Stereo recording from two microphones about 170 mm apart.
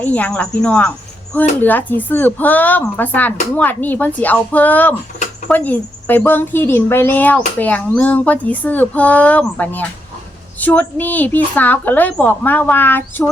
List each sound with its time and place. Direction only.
0.0 s a woman's voice: 10° left (ahead or behind)